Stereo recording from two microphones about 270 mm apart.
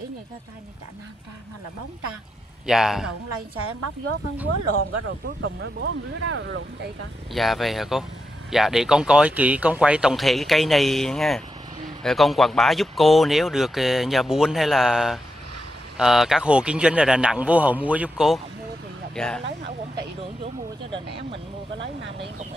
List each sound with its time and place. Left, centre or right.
2.6 s speech: centre
4.7 s speech: right
7.3 s speech: centre
20.2 s speech: right
21.7 s speech: right